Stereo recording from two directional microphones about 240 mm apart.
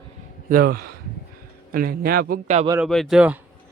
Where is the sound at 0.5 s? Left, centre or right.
Right.